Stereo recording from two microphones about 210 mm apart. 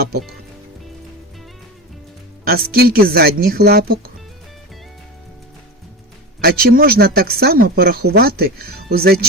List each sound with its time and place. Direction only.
2.5 s speech: 45° right (ahead or behind)
6.4 s speech: 45° right (ahead or behind)